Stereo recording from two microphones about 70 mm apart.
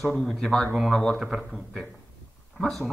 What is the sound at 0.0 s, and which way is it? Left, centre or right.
A man's voice, centre.